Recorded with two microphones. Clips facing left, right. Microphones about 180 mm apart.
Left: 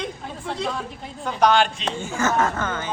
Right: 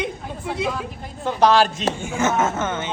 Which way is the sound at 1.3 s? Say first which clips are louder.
Right 2 dB; 35° right (ahead or behind).